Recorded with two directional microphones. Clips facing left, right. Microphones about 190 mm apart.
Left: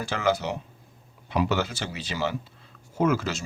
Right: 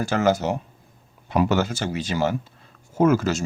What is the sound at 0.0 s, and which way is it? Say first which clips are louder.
Speech: right 5 dB; 45° right (ahead or behind).